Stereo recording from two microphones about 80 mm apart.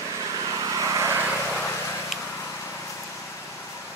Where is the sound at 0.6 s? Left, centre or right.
Right.